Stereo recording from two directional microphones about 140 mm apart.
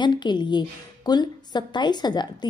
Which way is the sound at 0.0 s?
30° left (ahead or behind).